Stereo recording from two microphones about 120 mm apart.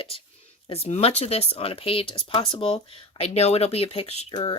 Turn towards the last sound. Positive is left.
turn(degrees=60)  # may be behind; listen again after turning